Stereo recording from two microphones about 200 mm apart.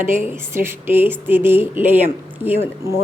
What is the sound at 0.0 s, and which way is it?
A woman's voice, 10° right (ahead or behind).